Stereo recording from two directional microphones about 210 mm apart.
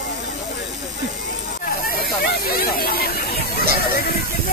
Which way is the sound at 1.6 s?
45° left (ahead or behind).